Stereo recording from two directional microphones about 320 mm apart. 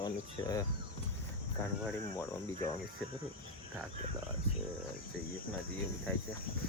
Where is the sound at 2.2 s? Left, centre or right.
Centre.